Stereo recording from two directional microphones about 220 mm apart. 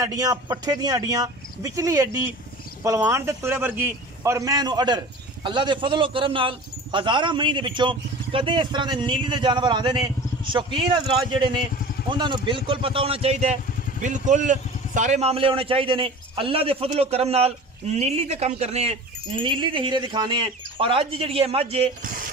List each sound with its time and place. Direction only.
0.0 s a man's voice: 15° right (ahead or behind)